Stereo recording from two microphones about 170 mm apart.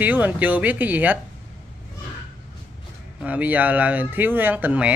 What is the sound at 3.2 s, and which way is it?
Speech, 10° right (ahead or behind).